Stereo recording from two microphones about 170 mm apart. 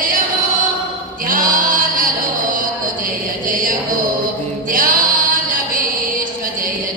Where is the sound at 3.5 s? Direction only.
55° right (ahead or behind).